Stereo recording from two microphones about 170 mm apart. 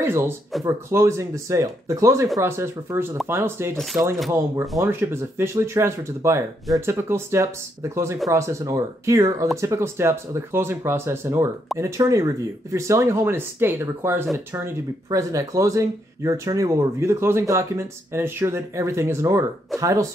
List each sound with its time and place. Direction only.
0.0 s speech: 15° right (ahead or behind)